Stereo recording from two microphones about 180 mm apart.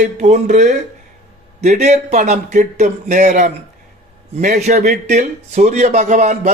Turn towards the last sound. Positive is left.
turn(degrees=-40)  # may be behind; listen again after turning